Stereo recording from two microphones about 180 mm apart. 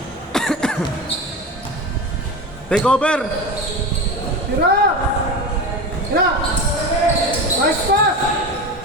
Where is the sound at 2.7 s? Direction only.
5° left (ahead or behind).